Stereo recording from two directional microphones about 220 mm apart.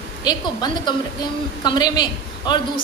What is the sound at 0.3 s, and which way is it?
A woman's voice, 20° left (ahead or behind).